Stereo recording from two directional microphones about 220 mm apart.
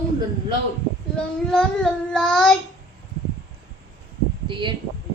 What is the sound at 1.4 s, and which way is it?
Child singing, 5° left (ahead or behind).